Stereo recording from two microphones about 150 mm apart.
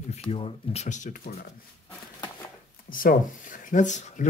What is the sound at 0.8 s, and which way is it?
Speech, 55° left (ahead or behind).